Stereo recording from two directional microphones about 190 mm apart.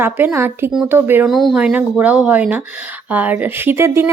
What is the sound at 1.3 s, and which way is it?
Speech, centre (ahead or behind).